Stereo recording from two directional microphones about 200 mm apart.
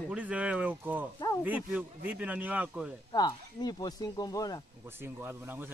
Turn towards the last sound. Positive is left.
turn(degrees=-10)  # may be behind; listen again after turning